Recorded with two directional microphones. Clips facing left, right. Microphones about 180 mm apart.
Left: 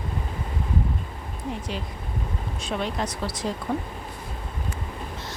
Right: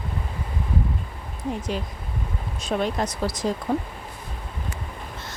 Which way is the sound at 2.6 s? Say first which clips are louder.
Right 4 dB; 45° right (ahead or behind).